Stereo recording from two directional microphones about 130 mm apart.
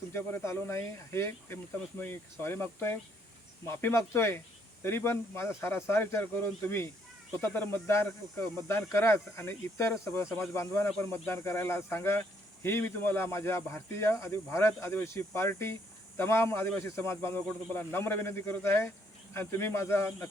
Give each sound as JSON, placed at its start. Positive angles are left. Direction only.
{"t": 0.1, "sound": "speech", "side_deg": 20}
{"t": 7.4, "sound": "speech", "side_deg": 15}